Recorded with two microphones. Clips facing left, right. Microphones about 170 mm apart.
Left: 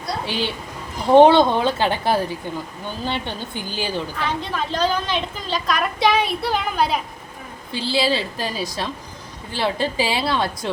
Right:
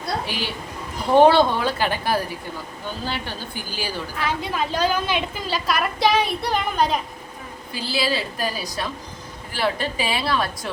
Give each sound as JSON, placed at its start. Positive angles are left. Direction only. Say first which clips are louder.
{"t": 0.3, "sound": "a woman's voice", "louder": "left 4 dB", "side_deg": 25}
{"t": 4.2, "sound": "a woman's voice", "louder": "even", "side_deg": -10}
{"t": 7.7, "sound": "a woman's voice", "louder": "left 4 dB", "side_deg": 25}